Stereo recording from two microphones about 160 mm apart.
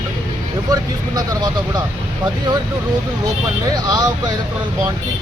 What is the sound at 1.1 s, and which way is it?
Speech, 25° right (ahead or behind).